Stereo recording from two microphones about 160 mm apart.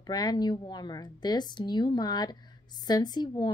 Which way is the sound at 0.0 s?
25° left (ahead or behind).